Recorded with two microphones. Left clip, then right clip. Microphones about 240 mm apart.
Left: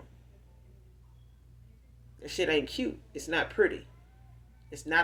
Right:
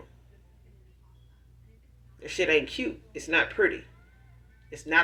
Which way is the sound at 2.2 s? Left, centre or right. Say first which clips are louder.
Right 4 dB; left.